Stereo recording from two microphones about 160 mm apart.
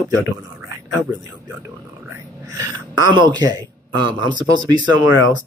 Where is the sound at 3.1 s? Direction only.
30° right (ahead or behind).